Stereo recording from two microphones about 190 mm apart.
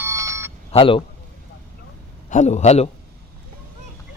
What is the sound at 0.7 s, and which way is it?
Speech, 30° left (ahead or behind).